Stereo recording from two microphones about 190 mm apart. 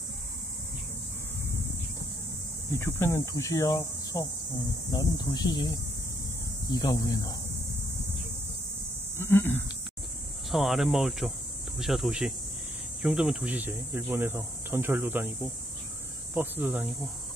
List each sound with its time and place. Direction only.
2.7 s speech: 15° left (ahead or behind)
9.1 s a sound: 10° left (ahead or behind)
10.5 s cricket: centre (ahead or behind)
13.0 s speech: 5° right (ahead or behind)
16.3 s speech: 10° right (ahead or behind)